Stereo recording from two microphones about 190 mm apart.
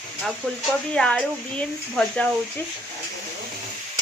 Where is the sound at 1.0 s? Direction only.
5° left (ahead or behind).